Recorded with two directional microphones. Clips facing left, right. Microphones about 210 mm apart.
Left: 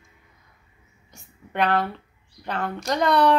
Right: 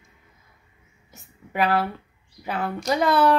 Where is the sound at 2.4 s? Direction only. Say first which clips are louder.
Right 2 dB; 5° right (ahead or behind).